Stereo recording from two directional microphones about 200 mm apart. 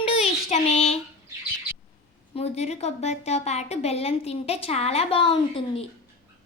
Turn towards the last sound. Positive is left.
turn(degrees=25)  # may be behind; listen again after turning